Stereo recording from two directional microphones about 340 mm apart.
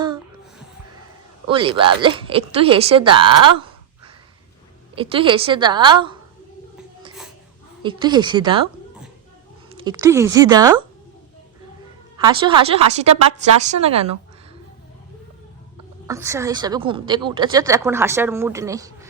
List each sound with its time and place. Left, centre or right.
1.5 s a woman's voice: centre
4.9 s a woman's voice: centre
7.8 s a woman's voice: centre
9.7 s a woman's voice: centre
12.1 s a woman's voice: centre
16.0 s a woman's voice: centre